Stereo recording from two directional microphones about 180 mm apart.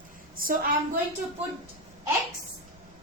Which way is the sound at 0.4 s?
50° right (ahead or behind).